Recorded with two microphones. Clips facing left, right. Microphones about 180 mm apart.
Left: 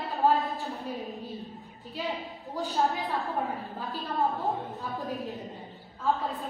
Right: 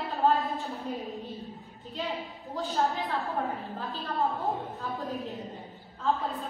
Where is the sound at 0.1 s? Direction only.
Centre (ahead or behind).